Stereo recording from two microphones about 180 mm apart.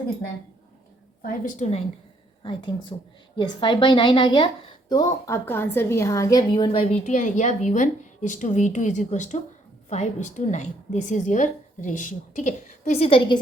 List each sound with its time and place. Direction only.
1.2 s a woman's voice: 50° left (ahead or behind)
2.4 s a woman's voice: 25° left (ahead or behind)
7.0 s a woman's voice: 45° left (ahead or behind); by 13.4 s 25° left (ahead or behind)